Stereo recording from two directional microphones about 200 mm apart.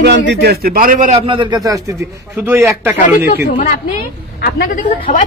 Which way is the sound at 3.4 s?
40° left (ahead or behind).